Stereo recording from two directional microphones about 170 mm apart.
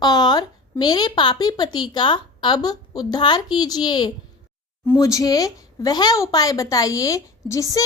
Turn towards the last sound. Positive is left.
turn(degrees=20)  # may be behind; listen again after turning